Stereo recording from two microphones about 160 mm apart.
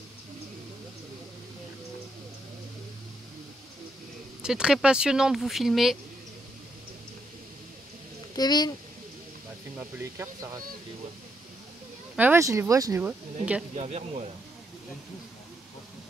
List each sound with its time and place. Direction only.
4.4 s speech: 5° right (ahead or behind)
8.4 s speech: 25° left (ahead or behind)
9.8 s speech: 20° right (ahead or behind)
12.2 s speech: 15° right (ahead or behind)
13.7 s speech: 40° right (ahead or behind)